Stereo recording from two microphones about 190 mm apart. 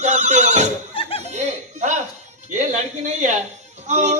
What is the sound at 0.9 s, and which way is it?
Speech, 30° left (ahead or behind).